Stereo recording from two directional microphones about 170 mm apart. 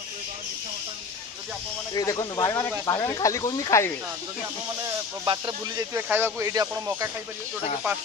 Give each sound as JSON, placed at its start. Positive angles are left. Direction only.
{"t": 2.0, "sound": "speech", "side_deg": 25}
{"t": 4.8, "sound": "speech", "side_deg": -25}
{"t": 5.9, "sound": "speech", "side_deg": -10}